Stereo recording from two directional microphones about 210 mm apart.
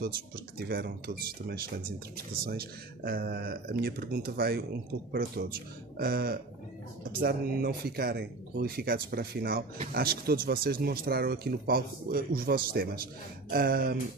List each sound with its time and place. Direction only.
0.6 s speech: 50° right (ahead or behind)